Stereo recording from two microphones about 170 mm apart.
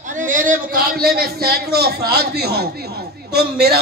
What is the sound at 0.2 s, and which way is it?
A man's voice, 50° right (ahead or behind).